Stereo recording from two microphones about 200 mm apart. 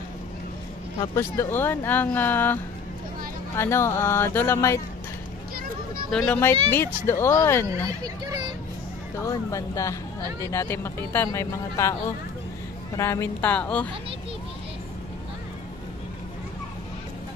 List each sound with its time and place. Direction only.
1.1 s speech: 15° left (ahead or behind)
6.0 s speech: centre (ahead or behind)
7.6 s a child's voice: 15° right (ahead or behind)
9.3 s speech: 15° left (ahead or behind)
12.9 s speech: 15° left (ahead or behind)